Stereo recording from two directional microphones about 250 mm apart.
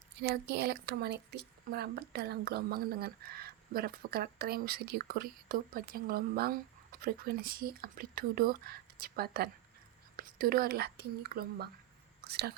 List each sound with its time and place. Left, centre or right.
0.2 s a woman's voice: right